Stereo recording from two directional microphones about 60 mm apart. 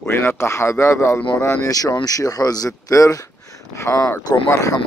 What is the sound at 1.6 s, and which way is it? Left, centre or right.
Speech, left.